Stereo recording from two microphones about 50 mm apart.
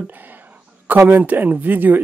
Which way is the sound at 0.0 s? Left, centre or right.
Right.